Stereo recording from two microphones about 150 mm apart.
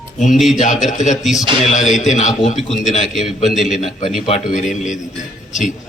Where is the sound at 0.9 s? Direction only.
55° left (ahead or behind).